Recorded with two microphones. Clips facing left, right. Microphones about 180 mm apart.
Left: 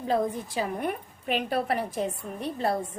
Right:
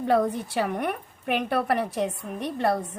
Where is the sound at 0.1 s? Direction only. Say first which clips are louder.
Right 3 dB; 70° right (ahead or behind).